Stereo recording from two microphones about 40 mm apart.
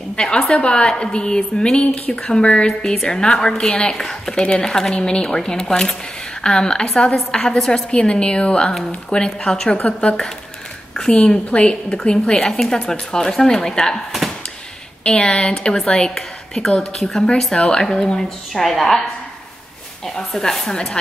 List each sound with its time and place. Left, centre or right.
0.1 s a woman's voice: left
2.8 s a woman's voice: centre
3.9 s a woman's voice: centre
4.4 s a woman's voice: left
4.6 s a woman's voice: centre
4.9 s a woman's voice: left
7.9 s a woman's voice: left
12.0 s a woman's voice: centre
15.0 s a woman's voice: left
18.5 s a woman's voice: centre
20.2 s a woman's voice: centre